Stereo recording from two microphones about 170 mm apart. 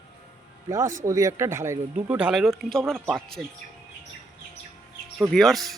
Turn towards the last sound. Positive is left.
turn(degrees=0)  # may be behind; listen again after turning